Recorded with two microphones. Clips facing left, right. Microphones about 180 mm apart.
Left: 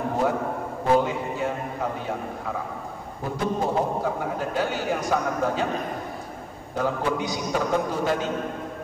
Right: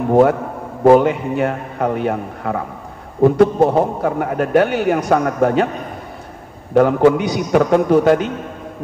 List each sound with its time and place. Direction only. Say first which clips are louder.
0.1 s a man's voice: right 14 dB; 70° right (ahead or behind)
6.7 s a man's voice: right 14 dB; 75° right (ahead or behind)